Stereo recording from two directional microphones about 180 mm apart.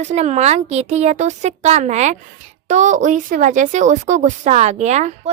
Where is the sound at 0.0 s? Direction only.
40° right (ahead or behind).